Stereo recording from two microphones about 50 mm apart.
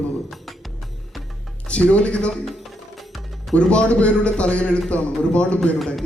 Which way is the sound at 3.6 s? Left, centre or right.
Left.